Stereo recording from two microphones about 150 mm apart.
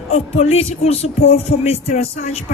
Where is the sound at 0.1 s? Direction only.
45° left (ahead or behind).